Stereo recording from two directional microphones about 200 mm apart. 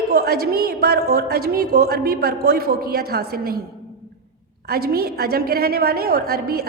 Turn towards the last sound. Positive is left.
turn(degrees=-50)  # may be behind; listen again after turning